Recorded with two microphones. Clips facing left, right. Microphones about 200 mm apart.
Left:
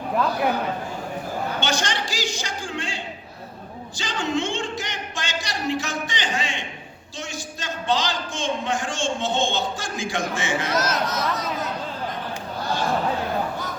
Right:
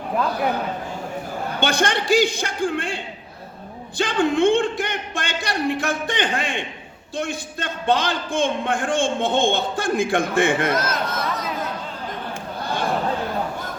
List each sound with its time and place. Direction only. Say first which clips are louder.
1.6 s a man's voice: right 5 dB; 55° right (ahead or behind)